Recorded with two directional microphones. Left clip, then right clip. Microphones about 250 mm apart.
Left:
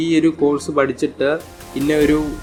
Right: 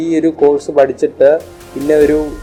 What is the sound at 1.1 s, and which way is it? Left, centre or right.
Speech, left.